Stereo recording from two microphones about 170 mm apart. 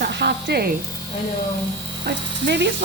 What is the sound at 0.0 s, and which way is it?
Music, 70° right (ahead or behind).